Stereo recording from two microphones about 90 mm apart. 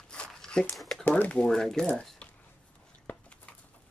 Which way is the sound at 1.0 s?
15° left (ahead or behind).